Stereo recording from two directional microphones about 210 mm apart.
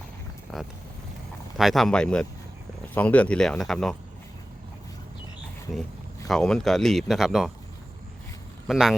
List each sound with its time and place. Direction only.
0.5 s vehicle: centre (ahead or behind)
1.5 s speech: centre (ahead or behind)
6.2 s speech: centre (ahead or behind)
8.6 s speech: centre (ahead or behind)